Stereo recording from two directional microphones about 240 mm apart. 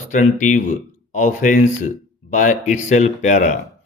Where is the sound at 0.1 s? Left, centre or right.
Left.